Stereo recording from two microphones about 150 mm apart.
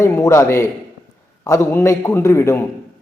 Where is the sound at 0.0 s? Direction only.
20° left (ahead or behind).